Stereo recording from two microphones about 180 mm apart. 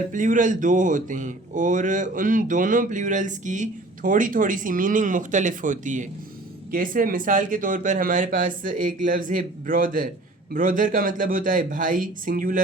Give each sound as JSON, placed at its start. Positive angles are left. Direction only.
{"t": 0.1, "sound": "speech", "side_deg": -45}